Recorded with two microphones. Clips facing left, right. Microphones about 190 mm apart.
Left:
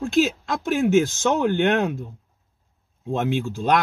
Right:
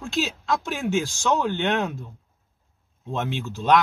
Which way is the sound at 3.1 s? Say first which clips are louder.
Left 5 dB; 50° left (ahead or behind).